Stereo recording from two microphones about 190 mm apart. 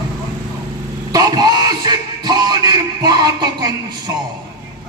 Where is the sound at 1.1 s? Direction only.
20° right (ahead or behind).